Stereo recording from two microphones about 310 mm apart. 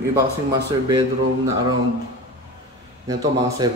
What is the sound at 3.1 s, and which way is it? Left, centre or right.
Speech, centre.